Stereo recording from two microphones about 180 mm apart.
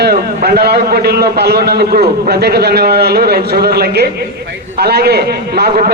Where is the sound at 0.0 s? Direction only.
60° right (ahead or behind).